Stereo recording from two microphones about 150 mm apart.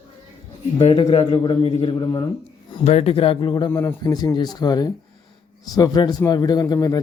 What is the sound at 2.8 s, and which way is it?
Speech, 45° left (ahead or behind).